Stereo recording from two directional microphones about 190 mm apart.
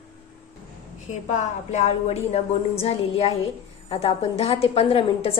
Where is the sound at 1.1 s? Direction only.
35° left (ahead or behind).